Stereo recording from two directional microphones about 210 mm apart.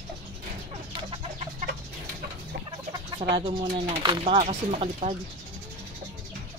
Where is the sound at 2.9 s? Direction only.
20° right (ahead or behind).